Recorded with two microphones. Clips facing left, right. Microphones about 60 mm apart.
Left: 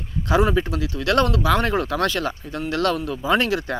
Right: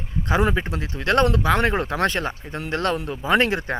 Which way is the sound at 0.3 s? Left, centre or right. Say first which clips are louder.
Left 2 dB; right.